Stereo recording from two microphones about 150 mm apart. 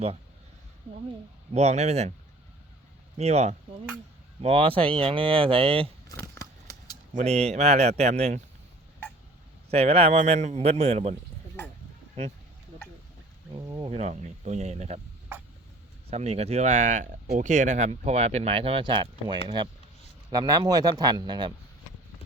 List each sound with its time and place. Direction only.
1.5 s speech: 45° right (ahead or behind)
3.2 s speech: 45° right (ahead or behind)
6.1 s a sound: 25° left (ahead or behind)
7.1 s speech: 50° right (ahead or behind)
9.6 s speech: 45° right (ahead or behind)
13.5 s a sound: 25° right (ahead or behind)
13.9 s speech: 50° right (ahead or behind)
16.0 s speech: 45° right (ahead or behind); by 21.5 s 30° right (ahead or behind)